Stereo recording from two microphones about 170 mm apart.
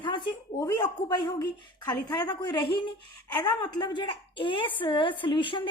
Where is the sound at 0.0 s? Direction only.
30° left (ahead or behind).